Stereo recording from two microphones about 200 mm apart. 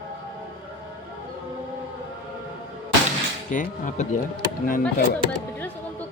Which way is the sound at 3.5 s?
40° left (ahead or behind).